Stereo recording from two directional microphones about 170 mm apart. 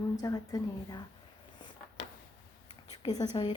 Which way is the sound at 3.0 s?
20° left (ahead or behind).